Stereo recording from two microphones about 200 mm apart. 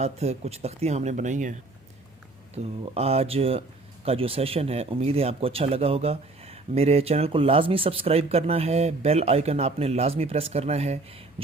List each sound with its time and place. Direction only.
0.0 s speech: 30° right (ahead or behind)
2.8 s speech: 30° right (ahead or behind)